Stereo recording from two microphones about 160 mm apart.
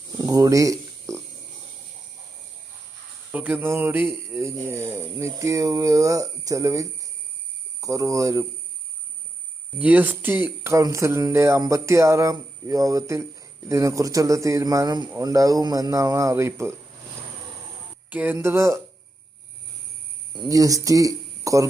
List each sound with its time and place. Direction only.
0.2 s a sound: 20° right (ahead or behind)
3.3 s speech: 10° right (ahead or behind)
9.7 s speech: 10° right (ahead or behind)
18.1 s speech: 10° right (ahead or behind)
20.4 s speech: 20° right (ahead or behind)